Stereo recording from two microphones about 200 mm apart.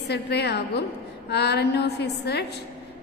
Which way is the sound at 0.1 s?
55° left (ahead or behind).